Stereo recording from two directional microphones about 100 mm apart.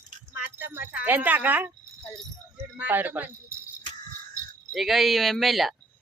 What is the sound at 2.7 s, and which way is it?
Speech, 15° right (ahead or behind).